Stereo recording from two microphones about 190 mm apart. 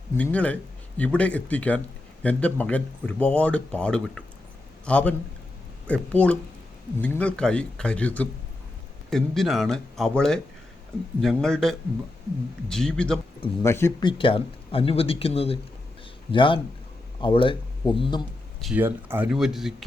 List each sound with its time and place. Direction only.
0.2 s speech: 5° left (ahead or behind)
13.4 s speech: 15° left (ahead or behind)
14.0 s speech: 25° left (ahead or behind)
18.6 s speech: 10° right (ahead or behind)